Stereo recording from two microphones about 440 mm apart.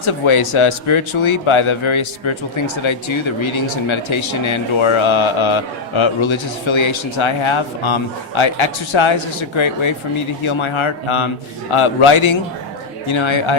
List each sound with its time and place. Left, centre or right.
0.0 s speech: left